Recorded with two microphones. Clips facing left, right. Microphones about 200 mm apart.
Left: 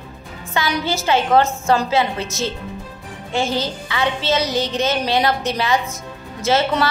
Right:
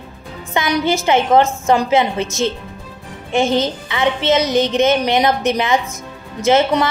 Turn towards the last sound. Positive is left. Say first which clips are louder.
# right 4 dB
turn(degrees=-15)  # may be behind; listen again after turning